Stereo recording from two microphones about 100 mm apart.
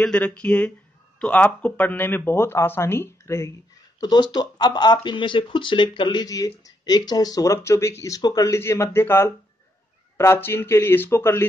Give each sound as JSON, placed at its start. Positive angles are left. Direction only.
{"t": 0.0, "sound": "speech", "side_deg": 10}
{"t": 4.0, "sound": "speech", "side_deg": 45}
{"t": 6.2, "sound": "speech", "side_deg": 35}
{"t": 8.2, "sound": "speech", "side_deg": 40}